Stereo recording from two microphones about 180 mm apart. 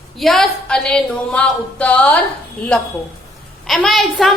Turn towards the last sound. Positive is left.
turn(degrees=0)  # may be behind; listen again after turning